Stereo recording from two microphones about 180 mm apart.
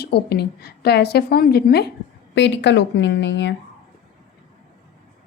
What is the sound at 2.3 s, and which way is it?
A woman's voice, 80° left.